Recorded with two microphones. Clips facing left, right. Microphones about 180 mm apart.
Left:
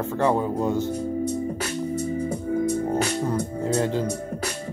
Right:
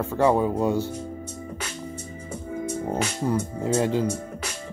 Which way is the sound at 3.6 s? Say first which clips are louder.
Right 1 dB; 15° right (ahead or behind).